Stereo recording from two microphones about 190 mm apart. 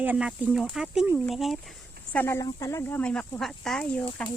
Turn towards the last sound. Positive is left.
turn(degrees=5)  # may be behind; listen again after turning